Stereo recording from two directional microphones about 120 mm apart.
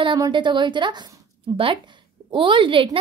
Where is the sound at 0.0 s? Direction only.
40° right (ahead or behind).